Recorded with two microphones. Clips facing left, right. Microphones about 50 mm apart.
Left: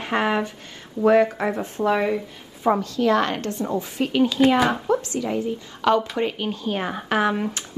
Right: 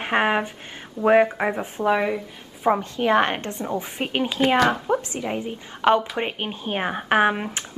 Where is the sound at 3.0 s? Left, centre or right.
Right.